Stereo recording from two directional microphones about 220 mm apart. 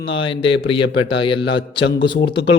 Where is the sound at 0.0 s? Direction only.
25° left (ahead or behind).